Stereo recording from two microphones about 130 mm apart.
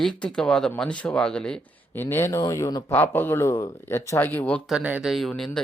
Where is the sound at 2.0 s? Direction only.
15° left (ahead or behind).